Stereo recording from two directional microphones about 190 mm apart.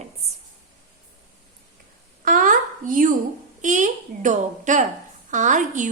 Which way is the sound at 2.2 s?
45° right (ahead or behind).